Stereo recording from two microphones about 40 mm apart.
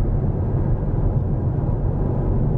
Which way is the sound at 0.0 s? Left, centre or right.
Centre.